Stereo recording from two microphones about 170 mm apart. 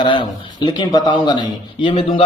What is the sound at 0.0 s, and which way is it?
A man's voice, 25° left (ahead or behind).